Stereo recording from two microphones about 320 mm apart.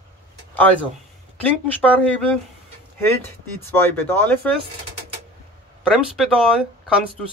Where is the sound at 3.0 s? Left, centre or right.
Centre.